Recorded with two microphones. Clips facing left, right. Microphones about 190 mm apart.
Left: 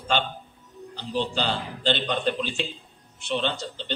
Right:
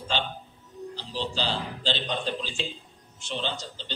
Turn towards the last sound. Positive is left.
turn(degrees=60)  # may be behind; listen again after turning